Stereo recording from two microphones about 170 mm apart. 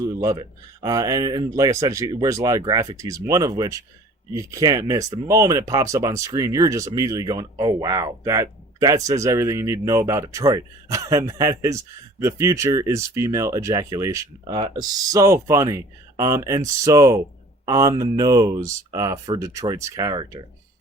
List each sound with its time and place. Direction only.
0.2 s speech: 20° right (ahead or behind)